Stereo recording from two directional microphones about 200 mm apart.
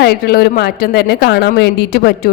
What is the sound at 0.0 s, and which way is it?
Speech, 50° left (ahead or behind).